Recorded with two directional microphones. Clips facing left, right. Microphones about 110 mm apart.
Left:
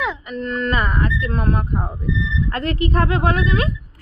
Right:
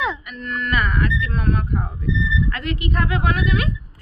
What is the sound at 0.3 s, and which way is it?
Speech, 30° left (ahead or behind).